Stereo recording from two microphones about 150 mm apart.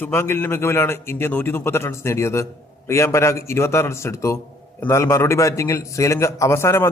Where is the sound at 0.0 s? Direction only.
15° left (ahead or behind).